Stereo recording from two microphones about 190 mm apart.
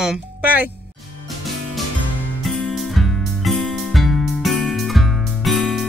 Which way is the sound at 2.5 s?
Centre (ahead or behind).